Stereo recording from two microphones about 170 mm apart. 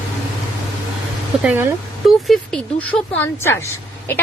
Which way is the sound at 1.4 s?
10° right (ahead or behind).